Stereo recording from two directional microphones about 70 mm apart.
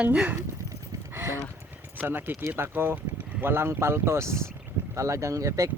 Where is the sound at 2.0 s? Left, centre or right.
Right.